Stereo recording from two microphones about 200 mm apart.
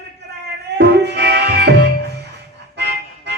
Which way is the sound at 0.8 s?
55° right (ahead or behind).